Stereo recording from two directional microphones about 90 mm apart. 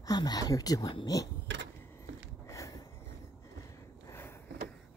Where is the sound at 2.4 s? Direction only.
40° left (ahead or behind).